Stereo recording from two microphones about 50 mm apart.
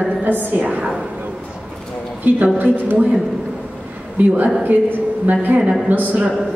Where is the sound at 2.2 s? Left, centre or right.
Right.